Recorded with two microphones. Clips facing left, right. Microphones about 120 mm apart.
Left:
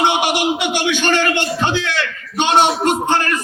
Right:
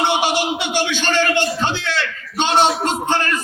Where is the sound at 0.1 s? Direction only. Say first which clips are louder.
Left 1 dB; 15° left (ahead or behind).